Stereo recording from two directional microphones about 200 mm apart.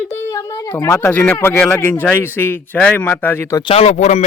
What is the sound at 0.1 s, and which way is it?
Speech, 15° left (ahead or behind).